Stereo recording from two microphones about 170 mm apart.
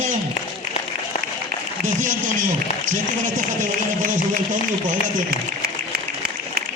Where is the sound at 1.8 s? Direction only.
50° right (ahead or behind).